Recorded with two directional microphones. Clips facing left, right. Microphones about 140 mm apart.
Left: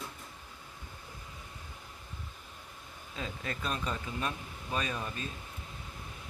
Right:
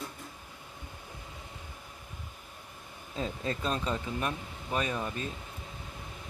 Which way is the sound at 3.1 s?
30° right (ahead or behind).